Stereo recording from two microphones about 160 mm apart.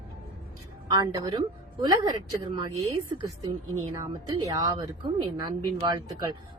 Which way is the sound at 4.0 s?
20° right (ahead or behind).